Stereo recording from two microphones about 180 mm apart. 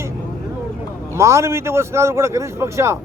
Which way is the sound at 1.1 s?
15° right (ahead or behind).